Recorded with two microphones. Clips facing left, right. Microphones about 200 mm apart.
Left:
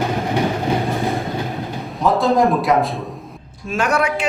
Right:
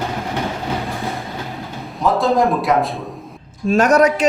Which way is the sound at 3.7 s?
40° right (ahead or behind).